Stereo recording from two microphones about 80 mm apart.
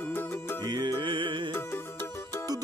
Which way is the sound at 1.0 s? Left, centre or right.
Right.